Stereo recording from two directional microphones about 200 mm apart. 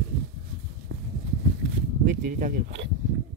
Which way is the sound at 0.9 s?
80° right.